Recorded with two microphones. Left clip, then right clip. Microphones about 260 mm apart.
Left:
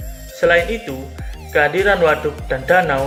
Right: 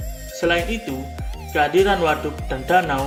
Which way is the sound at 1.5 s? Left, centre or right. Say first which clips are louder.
Left 3 dB; centre.